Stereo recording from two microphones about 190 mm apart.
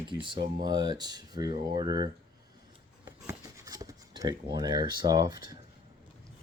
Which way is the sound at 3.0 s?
15° right (ahead or behind).